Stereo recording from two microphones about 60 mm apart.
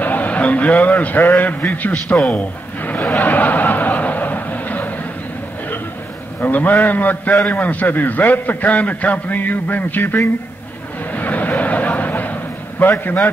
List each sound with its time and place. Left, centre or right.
0.0 s a man's voice: left
2.3 s chuckle: left
6.4 s a man's voice: left
11.1 s a sound: left
13.0 s a man's voice: left